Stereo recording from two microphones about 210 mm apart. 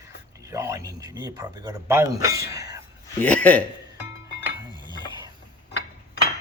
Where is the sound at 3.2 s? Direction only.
5° left (ahead or behind).